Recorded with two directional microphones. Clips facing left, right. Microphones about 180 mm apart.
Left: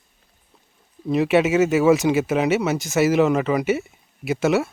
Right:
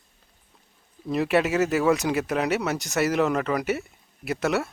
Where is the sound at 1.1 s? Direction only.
Centre (ahead or behind).